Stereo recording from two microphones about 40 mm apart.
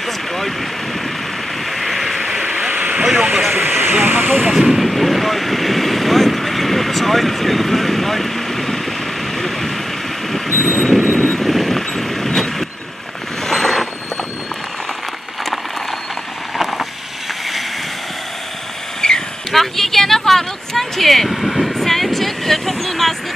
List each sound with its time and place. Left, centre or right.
1.8 s vehicle: centre
2.7 s vehicle: right
3.0 s vehicle: centre
3.5 s speech: right
4.6 s speech: centre
10.6 s vehicle: centre
18.9 s vehicle: centre
19.5 s a sound: centre